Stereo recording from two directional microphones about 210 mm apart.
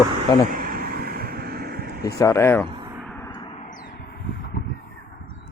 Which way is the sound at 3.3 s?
20° left (ahead or behind).